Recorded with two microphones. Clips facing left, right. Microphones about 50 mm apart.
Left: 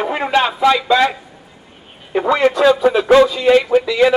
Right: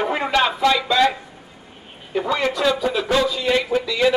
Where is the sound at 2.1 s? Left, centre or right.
Left.